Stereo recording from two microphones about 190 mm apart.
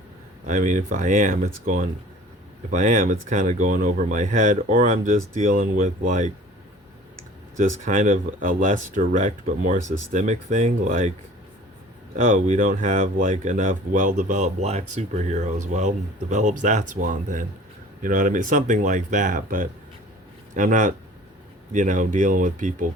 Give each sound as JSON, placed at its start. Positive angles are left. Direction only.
{"t": 0.4, "sound": "speech", "side_deg": -40}
{"t": 7.5, "sound": "speech", "side_deg": -40}
{"t": 12.1, "sound": "speech", "side_deg": -40}